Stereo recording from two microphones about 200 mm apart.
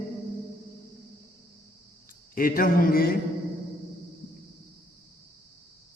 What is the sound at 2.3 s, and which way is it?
Speech, 45° left (ahead or behind).